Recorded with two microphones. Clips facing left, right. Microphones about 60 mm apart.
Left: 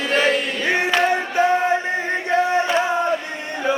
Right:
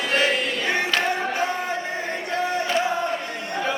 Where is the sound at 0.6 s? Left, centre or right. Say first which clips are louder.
Left 5 dB; left.